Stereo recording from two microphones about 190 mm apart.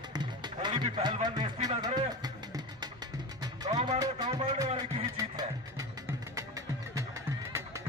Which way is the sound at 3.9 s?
20° right (ahead or behind).